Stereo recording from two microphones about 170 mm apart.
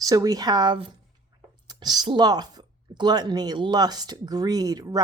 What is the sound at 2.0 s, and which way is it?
Speech, 25° right (ahead or behind).